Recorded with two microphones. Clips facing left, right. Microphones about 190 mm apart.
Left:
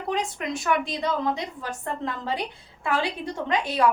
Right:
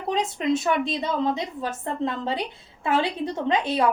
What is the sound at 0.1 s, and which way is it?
A woman's voice, 20° right (ahead or behind).